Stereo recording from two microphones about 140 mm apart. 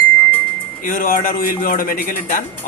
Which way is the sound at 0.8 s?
80° left.